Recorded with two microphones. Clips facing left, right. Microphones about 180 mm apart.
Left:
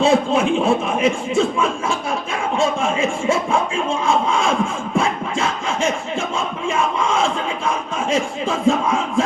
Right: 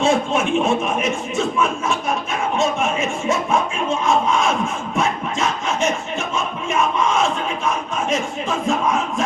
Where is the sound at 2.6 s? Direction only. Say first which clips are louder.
Left 2 dB; 30° left (ahead or behind).